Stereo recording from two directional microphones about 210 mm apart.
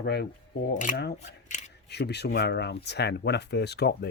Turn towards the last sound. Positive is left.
turn(degrees=50)  # may be behind; listen again after turning